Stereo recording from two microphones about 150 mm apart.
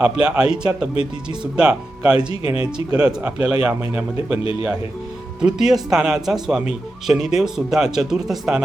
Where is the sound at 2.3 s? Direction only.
40° left (ahead or behind).